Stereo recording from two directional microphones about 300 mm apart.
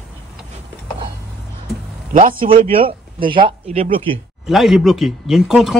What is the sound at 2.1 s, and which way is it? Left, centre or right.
Speech, right.